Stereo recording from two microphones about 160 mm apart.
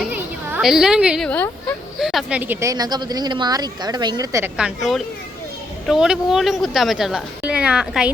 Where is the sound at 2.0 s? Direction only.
Centre (ahead or behind); by 4.5 s 20° right (ahead or behind).